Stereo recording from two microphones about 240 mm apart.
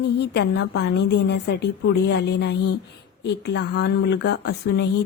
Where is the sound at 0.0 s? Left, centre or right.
Left.